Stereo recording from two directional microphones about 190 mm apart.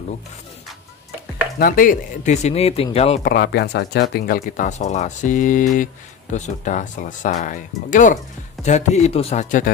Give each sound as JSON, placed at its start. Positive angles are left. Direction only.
{"t": 1.6, "sound": "speech", "side_deg": 45}
{"t": 3.3, "sound": "speech", "side_deg": 60}